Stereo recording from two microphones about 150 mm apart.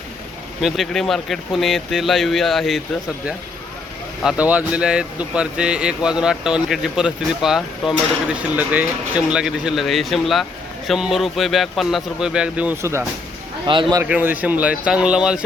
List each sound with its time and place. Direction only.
0.6 s speech: centre (ahead or behind)
4.2 s speech: 5° right (ahead or behind)
13.7 s speech: 35° right (ahead or behind)
14.1 s speech: 10° right (ahead or behind)